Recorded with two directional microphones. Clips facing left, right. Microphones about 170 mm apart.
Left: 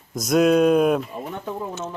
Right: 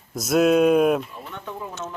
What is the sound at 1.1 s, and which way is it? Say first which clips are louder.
Speech: left 6 dB; 40° left (ahead or behind).